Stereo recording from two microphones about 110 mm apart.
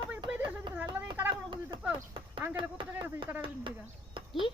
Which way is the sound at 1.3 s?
45° right (ahead or behind).